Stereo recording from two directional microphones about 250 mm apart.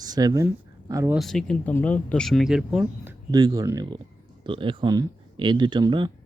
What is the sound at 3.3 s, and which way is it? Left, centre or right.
Speech, centre.